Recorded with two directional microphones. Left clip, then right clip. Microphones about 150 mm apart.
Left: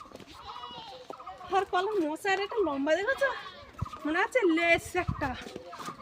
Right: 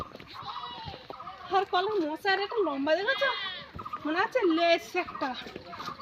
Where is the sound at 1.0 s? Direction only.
5° left (ahead or behind).